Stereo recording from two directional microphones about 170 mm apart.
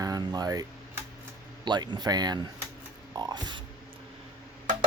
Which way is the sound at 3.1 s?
25° right (ahead or behind).